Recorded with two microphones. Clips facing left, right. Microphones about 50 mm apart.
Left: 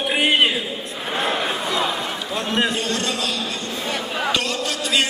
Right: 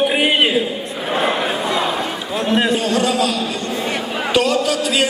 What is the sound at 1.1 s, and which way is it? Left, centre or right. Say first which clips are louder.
Crowd: right 4 dB; centre.